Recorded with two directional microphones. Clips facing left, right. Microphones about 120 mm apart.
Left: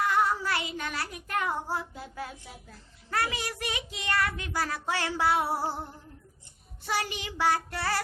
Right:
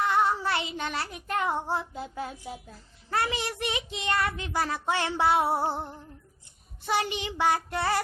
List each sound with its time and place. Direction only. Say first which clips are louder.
0.0 s child singing: right 1 dB; 25° right (ahead or behind)
3.1 s a child's voice: right 2 dB; 25° right (ahead or behind)